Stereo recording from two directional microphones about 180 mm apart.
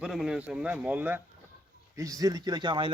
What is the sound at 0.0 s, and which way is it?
A man's voice, 5° right (ahead or behind).